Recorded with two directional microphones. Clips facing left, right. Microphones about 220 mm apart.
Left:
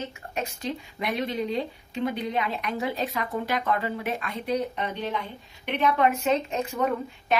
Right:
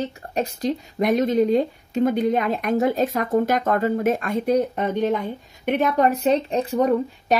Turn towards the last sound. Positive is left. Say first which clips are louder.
# right 7 dB
turn(degrees=-35)  # may be behind; listen again after turning